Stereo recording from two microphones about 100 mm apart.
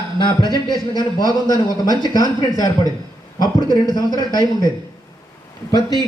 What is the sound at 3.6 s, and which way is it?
Speech, 40° right (ahead or behind).